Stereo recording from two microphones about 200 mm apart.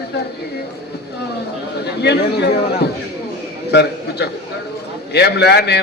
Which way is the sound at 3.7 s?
55° left (ahead or behind).